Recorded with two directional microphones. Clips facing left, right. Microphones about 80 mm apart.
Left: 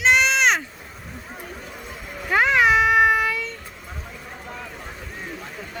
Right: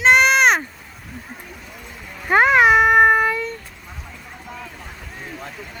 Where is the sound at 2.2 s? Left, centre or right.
Right.